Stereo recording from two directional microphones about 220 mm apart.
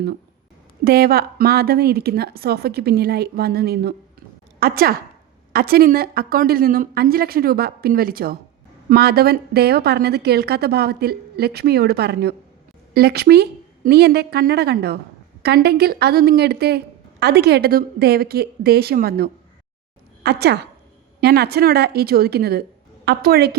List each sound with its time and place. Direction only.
0.9 s a woman's voice: 45° right (ahead or behind)